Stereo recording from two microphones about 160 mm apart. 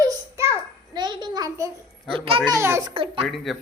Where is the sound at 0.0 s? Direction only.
20° right (ahead or behind).